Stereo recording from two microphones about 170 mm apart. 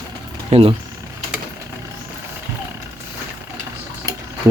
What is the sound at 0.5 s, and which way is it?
Speech, 40° right (ahead or behind).